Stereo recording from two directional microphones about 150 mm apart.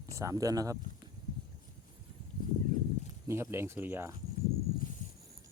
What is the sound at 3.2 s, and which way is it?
Speech, 20° right (ahead or behind).